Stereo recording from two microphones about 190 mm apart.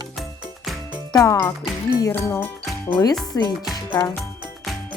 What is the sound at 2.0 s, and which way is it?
Music, 10° left (ahead or behind).